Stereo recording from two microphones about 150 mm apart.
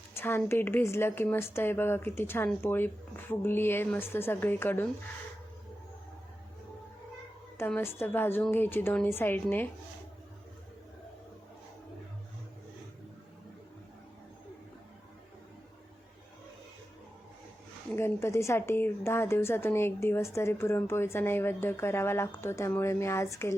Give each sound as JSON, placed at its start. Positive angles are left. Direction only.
{"t": 0.1, "sound": "a woman's voice", "side_deg": 15}
{"t": 7.8, "sound": "a woman's voice", "side_deg": 15}
{"t": 17.9, "sound": "a woman's voice", "side_deg": 15}